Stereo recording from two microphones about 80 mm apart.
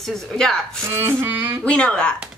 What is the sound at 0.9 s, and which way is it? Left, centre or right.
Speech, right.